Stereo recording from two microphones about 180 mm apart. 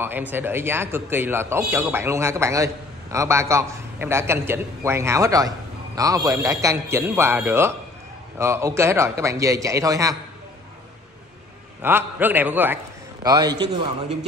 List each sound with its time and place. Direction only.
0.0 s a man's voice: 10° right (ahead or behind)
11.8 s a man's voice: 10° right (ahead or behind)
13.2 s a man's voice: 20° right (ahead or behind)